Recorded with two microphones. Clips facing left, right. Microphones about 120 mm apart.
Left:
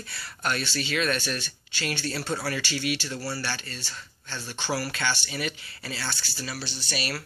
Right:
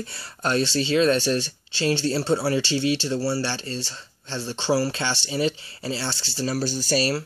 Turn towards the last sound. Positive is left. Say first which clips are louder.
# right 10 dB
turn(degrees=-35)  # may be behind; listen again after turning